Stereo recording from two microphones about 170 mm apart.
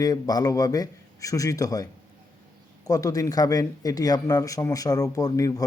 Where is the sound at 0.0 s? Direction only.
20° left (ahead or behind).